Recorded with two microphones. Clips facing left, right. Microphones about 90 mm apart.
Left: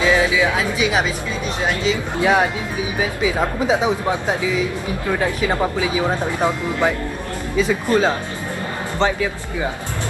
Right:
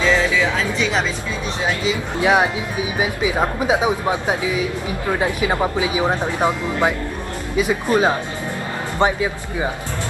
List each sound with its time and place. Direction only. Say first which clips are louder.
0.0 s music: left 1 dB; 10° left (ahead or behind)
1.9 s speech: even; 15° right (ahead or behind)